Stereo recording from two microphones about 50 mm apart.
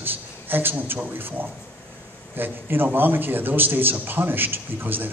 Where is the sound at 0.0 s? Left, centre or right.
Right.